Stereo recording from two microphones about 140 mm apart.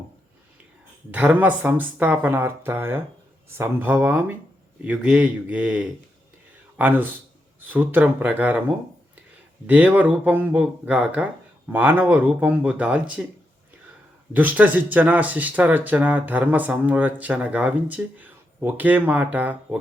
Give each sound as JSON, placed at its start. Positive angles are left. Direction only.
{"t": 1.1, "sound": "speech", "side_deg": -10}
{"t": 9.6, "sound": "speech", "side_deg": -10}
{"t": 14.3, "sound": "speech", "side_deg": -10}